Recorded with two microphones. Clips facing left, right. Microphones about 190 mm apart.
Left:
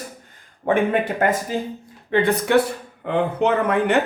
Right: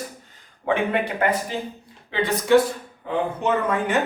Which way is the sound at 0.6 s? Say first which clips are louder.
Left 3 dB; 45° left (ahead or behind).